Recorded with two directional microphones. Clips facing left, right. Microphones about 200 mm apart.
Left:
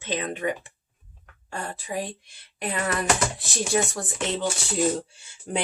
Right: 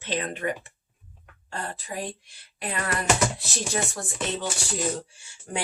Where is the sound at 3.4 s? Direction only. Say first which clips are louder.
Left 4 dB; 15° left (ahead or behind).